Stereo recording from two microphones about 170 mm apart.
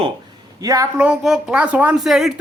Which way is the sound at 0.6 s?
20° right (ahead or behind).